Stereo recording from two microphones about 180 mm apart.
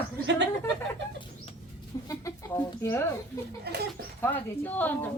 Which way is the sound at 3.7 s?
60° right (ahead or behind).